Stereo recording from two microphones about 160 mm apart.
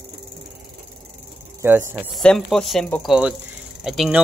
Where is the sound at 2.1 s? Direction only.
5° left (ahead or behind).